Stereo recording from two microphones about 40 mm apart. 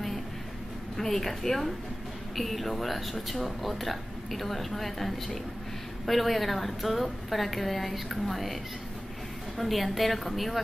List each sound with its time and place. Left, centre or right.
0.9 s speech: centre
9.6 s speech: centre